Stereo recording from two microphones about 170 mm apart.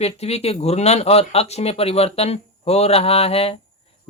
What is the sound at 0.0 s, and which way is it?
Speech, 35° left (ahead or behind).